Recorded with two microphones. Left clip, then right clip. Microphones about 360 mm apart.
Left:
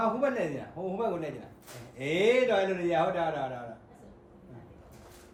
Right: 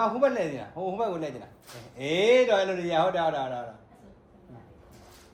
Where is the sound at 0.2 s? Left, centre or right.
Right.